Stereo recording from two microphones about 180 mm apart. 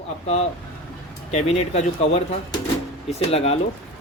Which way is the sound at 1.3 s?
35° left (ahead or behind).